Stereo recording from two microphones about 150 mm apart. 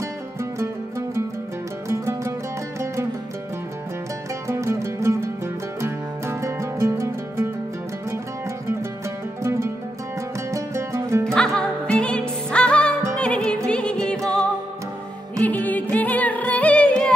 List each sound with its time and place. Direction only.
0.4 s music: 20° right (ahead or behind)
4.5 s music: 20° right (ahead or behind)
9.4 s music: 20° right (ahead or behind)
11.3 s music: 5° left (ahead or behind)